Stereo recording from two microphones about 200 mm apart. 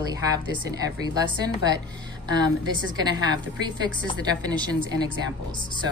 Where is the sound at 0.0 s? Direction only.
20° right (ahead or behind).